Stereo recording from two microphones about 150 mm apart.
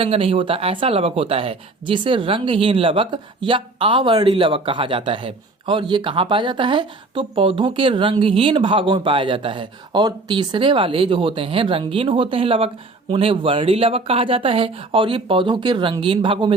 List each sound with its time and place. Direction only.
0.0 s speech: 40° right (ahead or behind)